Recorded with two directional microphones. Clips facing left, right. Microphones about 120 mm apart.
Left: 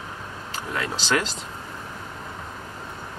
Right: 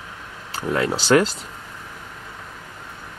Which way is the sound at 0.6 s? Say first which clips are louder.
Right 8 dB; 40° right (ahead or behind).